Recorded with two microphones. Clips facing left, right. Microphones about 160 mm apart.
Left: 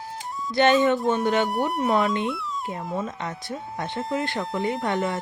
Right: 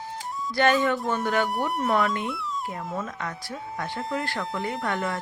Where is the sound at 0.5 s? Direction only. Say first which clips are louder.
Left 3 dB; 20° left (ahead or behind).